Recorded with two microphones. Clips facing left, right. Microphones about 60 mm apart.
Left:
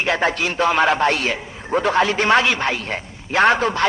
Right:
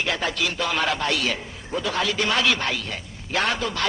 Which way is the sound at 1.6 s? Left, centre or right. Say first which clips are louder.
Left 11 dB; left.